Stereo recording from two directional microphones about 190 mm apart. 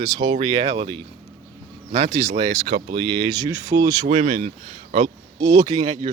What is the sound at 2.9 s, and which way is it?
Speech, 20° right (ahead or behind).